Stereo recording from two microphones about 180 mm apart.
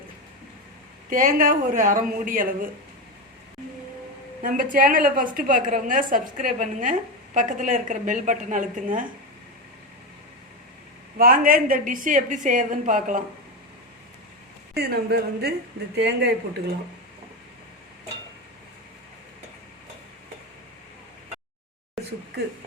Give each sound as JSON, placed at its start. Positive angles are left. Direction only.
{"t": 1.1, "sound": "a woman's voice", "side_deg": -50}
{"t": 4.4, "sound": "a woman's voice", "side_deg": -50}
{"t": 11.2, "sound": "a woman's voice", "side_deg": -55}
{"t": 14.8, "sound": "speech", "side_deg": -60}
{"t": 22.0, "sound": "a sound", "side_deg": 0}